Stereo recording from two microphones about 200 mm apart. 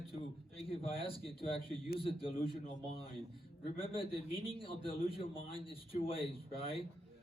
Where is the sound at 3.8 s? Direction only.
25° left (ahead or behind).